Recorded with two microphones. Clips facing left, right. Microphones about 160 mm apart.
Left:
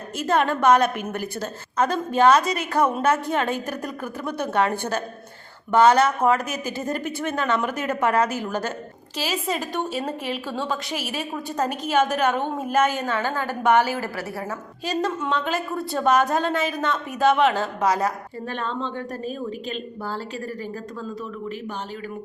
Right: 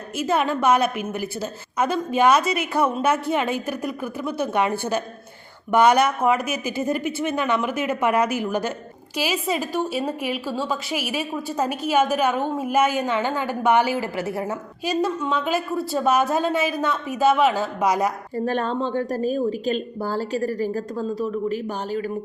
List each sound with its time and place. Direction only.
0.2 s a woman's voice: 10° right (ahead or behind)
15.2 s a woman's voice: 5° right (ahead or behind)
18.3 s a woman's voice: 40° right (ahead or behind)